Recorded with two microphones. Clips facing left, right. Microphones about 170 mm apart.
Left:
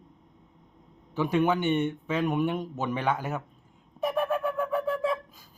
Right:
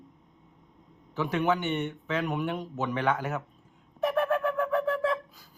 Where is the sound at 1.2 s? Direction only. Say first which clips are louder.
Left 2 dB; 15° left (ahead or behind).